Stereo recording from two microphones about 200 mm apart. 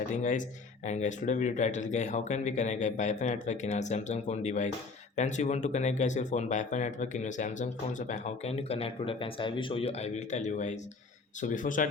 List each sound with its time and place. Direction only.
0.1 s speech: 40° left (ahead or behind)